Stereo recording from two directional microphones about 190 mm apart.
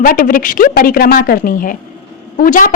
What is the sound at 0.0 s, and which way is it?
A woman's voice, 45° left (ahead or behind).